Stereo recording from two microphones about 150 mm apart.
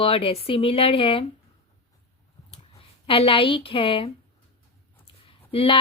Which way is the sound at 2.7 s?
40° left (ahead or behind).